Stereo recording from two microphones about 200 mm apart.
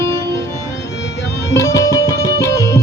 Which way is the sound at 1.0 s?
65° left (ahead or behind).